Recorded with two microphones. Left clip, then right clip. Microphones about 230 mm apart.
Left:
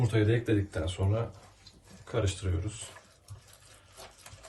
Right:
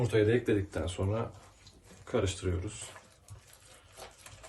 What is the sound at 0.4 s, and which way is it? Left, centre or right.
Speech, right.